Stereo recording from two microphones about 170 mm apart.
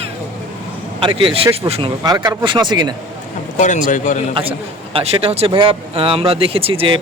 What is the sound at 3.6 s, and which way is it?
Speech, 50° left (ahead or behind).